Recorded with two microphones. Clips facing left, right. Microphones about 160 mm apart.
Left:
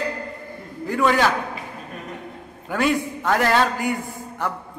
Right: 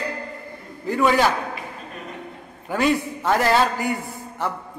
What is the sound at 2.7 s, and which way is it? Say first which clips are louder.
A man's voice: right 1 dB; centre (ahead or behind).